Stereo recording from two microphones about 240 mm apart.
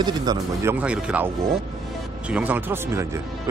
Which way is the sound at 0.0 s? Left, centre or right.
Centre.